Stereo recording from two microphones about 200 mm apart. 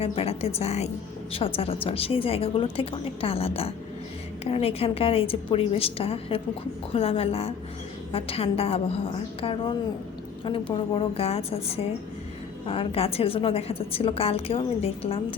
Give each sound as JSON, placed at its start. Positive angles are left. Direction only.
{"t": 0.0, "sound": "a woman's voice", "side_deg": 30}